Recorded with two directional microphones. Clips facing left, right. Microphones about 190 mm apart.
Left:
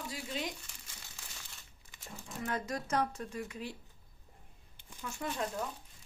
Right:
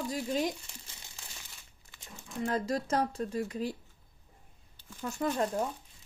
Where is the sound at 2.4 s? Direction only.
30° right (ahead or behind).